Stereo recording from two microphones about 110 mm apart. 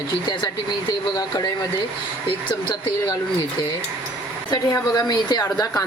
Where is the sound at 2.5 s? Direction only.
50° left (ahead or behind).